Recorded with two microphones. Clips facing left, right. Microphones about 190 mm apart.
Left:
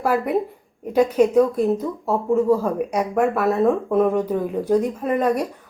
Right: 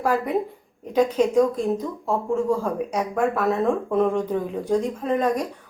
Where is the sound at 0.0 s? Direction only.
10° left (ahead or behind).